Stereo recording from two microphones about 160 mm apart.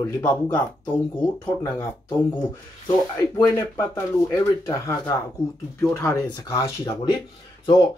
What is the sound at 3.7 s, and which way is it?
Speech, 20° left (ahead or behind).